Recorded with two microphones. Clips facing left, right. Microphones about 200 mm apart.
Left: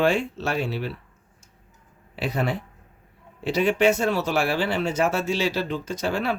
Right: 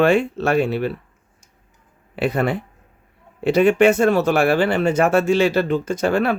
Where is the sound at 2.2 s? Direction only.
55° right (ahead or behind).